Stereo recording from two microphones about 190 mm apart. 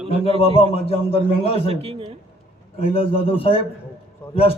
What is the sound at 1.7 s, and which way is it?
Speech, 30° right (ahead or behind).